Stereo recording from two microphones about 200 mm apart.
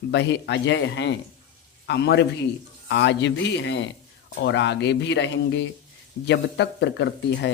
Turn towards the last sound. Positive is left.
turn(degrees=60)  # may be behind; listen again after turning